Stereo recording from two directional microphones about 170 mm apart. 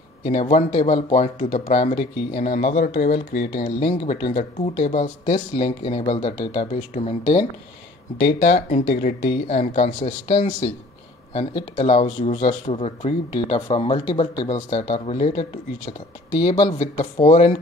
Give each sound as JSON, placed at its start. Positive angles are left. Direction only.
{"t": 0.2, "sound": "speech", "side_deg": 40}
{"t": 4.0, "sound": "speech", "side_deg": 40}
{"t": 4.8, "sound": "speech", "side_deg": 50}
{"t": 8.2, "sound": "speech", "side_deg": 75}
{"t": 8.5, "sound": "speech", "side_deg": 50}